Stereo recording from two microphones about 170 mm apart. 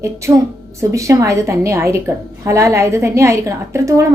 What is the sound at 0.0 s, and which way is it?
A woman's voice, 15° right (ahead or behind).